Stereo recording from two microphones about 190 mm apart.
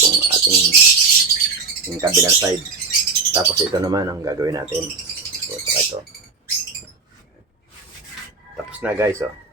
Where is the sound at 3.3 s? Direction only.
20° right (ahead or behind).